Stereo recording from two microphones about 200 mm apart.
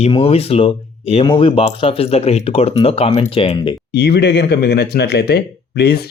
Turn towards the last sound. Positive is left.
turn(degrees=55)  # may be behind; listen again after turning